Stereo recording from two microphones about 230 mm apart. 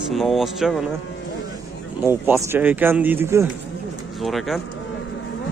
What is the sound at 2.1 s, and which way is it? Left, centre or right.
Speech, centre.